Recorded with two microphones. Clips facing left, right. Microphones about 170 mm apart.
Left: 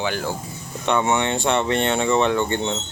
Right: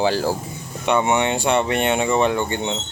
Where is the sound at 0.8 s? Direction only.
15° right (ahead or behind).